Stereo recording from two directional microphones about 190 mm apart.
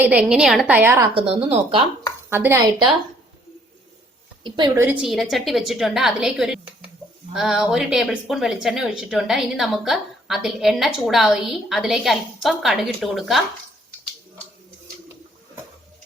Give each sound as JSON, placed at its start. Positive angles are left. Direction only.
{"t": 0.0, "sound": "a woman's voice", "side_deg": -5}
{"t": 1.1, "sound": "speech", "side_deg": -30}
{"t": 2.3, "sound": "a woman's voice", "side_deg": -15}
{"t": 4.4, "sound": "speech", "side_deg": -25}
{"t": 4.7, "sound": "a woman's voice", "side_deg": -10}